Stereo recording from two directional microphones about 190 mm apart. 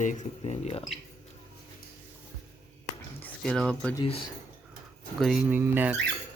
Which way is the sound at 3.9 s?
30° left (ahead or behind).